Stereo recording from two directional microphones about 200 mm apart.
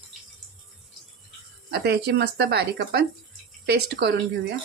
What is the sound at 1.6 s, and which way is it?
Speech, 55° right (ahead or behind).